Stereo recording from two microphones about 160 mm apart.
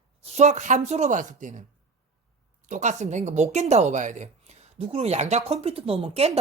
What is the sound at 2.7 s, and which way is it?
A woman's voice, 50° right (ahead or behind).